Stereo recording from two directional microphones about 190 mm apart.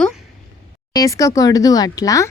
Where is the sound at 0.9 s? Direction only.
20° left (ahead or behind).